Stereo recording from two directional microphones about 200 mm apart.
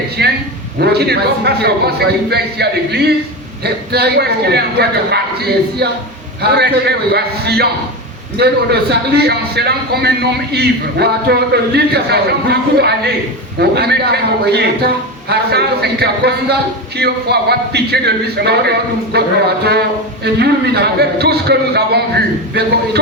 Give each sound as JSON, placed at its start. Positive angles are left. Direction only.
{"t": 0.2, "sound": "a man's voice", "side_deg": -55}
{"t": 20.2, "sound": "a man's voice", "side_deg": -55}